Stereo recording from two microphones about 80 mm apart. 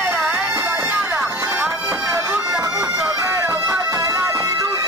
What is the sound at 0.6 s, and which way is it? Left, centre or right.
Music, right.